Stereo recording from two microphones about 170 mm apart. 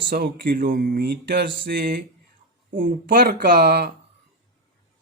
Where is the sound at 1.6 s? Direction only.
60° right (ahead or behind).